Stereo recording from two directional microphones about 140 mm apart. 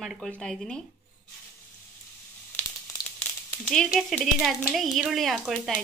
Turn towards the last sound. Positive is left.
turn(degrees=0)  # may be behind; listen again after turning